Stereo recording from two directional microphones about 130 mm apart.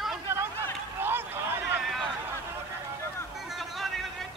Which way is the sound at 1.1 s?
15° right (ahead or behind).